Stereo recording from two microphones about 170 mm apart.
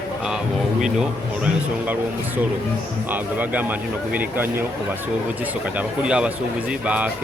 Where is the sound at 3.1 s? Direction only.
10° right (ahead or behind).